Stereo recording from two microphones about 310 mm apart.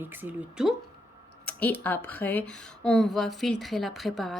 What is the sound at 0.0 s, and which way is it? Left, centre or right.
Speech, centre.